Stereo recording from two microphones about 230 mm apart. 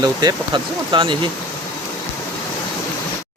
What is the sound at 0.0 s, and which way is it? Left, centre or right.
Speech, centre.